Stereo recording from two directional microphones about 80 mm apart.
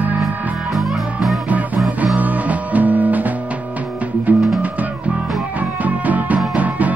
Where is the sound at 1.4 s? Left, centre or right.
Centre.